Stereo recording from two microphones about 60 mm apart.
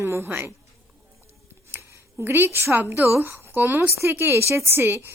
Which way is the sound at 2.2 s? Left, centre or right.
Right.